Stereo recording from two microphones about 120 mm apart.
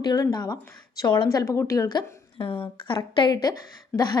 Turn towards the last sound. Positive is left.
turn(degrees=15)  # may be behind; listen again after turning